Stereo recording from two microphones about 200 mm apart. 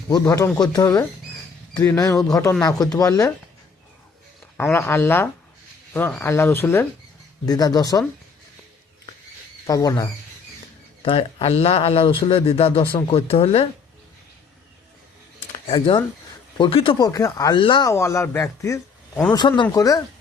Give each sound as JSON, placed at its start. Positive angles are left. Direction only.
{"t": 0.1, "sound": "speech", "side_deg": 15}
{"t": 4.5, "sound": "speech", "side_deg": 10}
{"t": 9.6, "sound": "speech", "side_deg": 15}
{"t": 15.5, "sound": "speech", "side_deg": 25}